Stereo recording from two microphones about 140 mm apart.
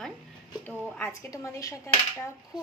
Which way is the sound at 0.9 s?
10° left (ahead or behind).